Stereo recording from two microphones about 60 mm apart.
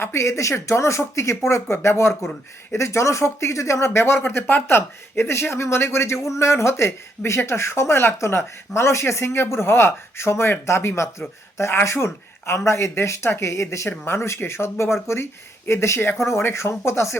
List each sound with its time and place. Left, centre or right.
0.0 s speech: left